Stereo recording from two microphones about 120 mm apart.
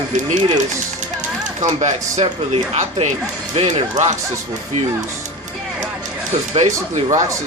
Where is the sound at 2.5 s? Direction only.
65° right (ahead or behind).